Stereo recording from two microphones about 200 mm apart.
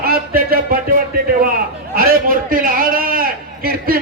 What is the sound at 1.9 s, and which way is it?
A man's voice, 45° right (ahead or behind).